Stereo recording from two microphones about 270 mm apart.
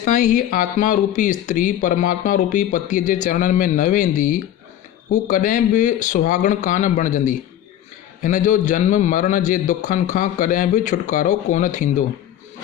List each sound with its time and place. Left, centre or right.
0.0 s speech: left